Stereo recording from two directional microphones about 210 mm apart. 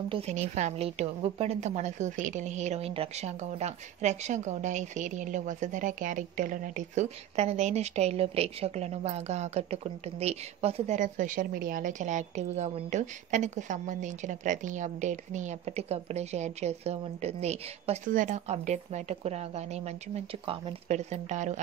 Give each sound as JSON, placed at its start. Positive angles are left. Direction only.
{"t": 0.1, "sound": "a woman's voice", "side_deg": -30}